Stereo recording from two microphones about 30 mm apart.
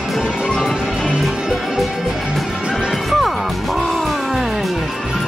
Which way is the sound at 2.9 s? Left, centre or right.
Centre.